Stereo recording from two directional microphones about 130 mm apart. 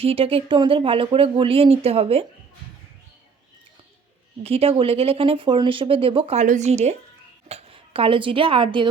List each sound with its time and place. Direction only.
0.0 s speech: 45° right (ahead or behind)
4.4 s speech: 50° right (ahead or behind)
6.4 s speech: 65° right (ahead or behind); by 8.9 s 40° right (ahead or behind)